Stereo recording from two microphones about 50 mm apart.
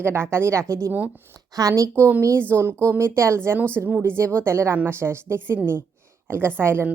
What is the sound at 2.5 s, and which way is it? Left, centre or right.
A woman's voice, right.